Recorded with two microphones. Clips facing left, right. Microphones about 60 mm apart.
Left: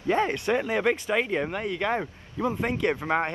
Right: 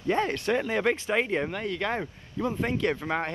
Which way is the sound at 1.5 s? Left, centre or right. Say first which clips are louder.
Left 2 dB; centre.